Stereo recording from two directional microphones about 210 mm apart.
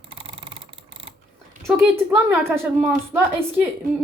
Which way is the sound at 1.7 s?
10° right (ahead or behind).